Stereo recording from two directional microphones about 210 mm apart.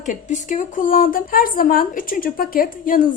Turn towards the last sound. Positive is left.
turn(degrees=40)  # may be behind; listen again after turning